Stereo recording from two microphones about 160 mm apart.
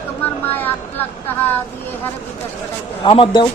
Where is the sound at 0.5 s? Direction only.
10° left (ahead or behind).